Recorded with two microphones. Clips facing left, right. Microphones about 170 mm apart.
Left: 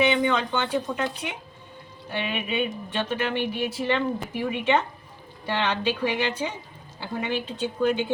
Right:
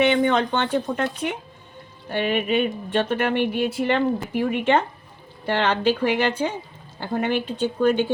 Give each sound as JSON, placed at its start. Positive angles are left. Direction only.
{"t": 0.0, "sound": "speech", "side_deg": -50}